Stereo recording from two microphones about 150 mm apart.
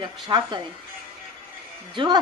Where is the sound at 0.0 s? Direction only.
30° right (ahead or behind).